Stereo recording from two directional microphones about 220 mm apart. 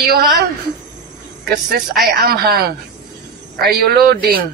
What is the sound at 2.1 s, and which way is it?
A woman's voice, 45° right (ahead or behind).